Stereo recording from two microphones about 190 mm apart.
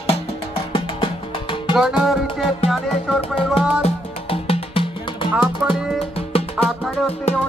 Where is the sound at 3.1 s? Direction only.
30° left (ahead or behind).